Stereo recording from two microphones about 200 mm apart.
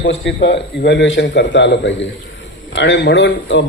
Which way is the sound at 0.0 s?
65° left (ahead or behind).